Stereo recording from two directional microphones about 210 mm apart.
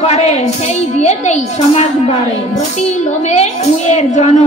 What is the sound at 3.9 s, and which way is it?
Speech, 30° left (ahead or behind).